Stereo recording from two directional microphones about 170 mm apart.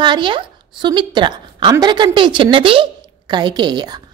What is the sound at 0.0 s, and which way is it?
A woman's voice, 30° right (ahead or behind).